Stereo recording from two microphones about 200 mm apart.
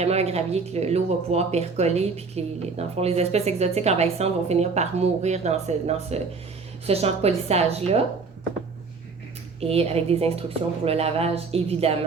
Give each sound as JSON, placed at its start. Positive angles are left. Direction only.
{"t": 0.0, "sound": "speech", "side_deg": -30}
{"t": 9.6, "sound": "a woman's voice", "side_deg": -30}